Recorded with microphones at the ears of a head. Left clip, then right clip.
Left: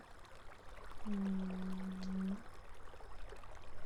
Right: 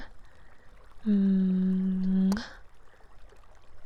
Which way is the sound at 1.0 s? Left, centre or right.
Right.